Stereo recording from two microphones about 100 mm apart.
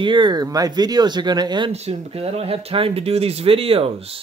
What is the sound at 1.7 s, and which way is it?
Speech, 85° right.